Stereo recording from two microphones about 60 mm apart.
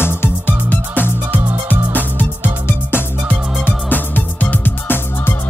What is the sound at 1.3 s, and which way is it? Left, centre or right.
Music, right.